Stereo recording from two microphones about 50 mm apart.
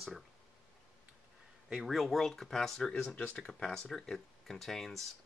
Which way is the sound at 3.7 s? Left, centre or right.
Centre.